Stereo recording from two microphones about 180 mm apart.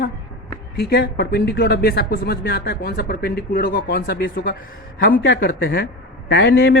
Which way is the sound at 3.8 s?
75° left (ahead or behind).